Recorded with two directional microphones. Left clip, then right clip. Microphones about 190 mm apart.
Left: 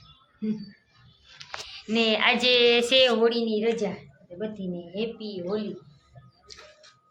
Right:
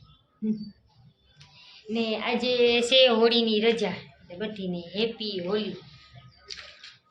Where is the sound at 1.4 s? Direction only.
40° left (ahead or behind).